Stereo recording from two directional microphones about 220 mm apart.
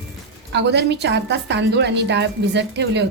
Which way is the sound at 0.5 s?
50° right (ahead or behind).